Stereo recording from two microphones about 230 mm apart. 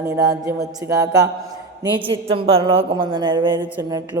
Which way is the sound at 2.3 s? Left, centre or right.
Right.